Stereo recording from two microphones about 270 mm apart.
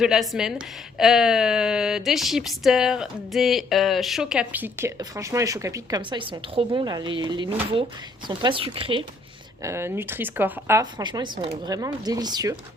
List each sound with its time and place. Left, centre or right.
0.0 s speech: centre